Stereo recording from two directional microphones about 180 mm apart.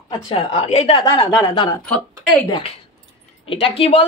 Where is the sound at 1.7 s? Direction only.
10° left (ahead or behind).